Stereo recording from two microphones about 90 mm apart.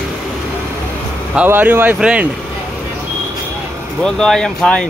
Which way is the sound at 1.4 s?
20° right (ahead or behind).